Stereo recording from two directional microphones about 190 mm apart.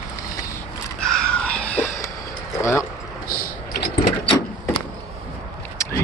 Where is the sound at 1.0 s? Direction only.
5° left (ahead or behind).